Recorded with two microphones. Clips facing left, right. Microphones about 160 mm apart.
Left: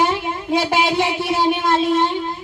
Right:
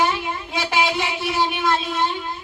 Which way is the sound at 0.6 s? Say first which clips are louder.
Left 4 dB; 45° left (ahead or behind).